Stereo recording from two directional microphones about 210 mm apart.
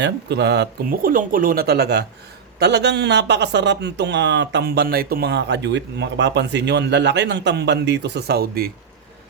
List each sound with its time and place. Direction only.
0.0 s a man's voice: 55° right (ahead or behind)